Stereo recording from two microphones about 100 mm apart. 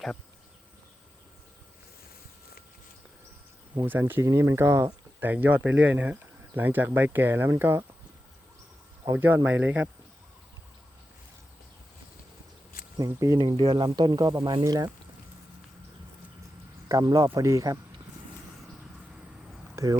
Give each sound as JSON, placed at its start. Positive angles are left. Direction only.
{"t": 4.0, "sound": "speech", "side_deg": -30}
{"t": 5.2, "sound": "speech", "side_deg": -20}
{"t": 9.1, "sound": "speech", "side_deg": -20}
{"t": 13.0, "sound": "speech", "side_deg": -35}
{"t": 13.4, "sound": "speech", "side_deg": -55}
{"t": 16.9, "sound": "speech", "side_deg": -40}
{"t": 19.7, "sound": "speech", "side_deg": -35}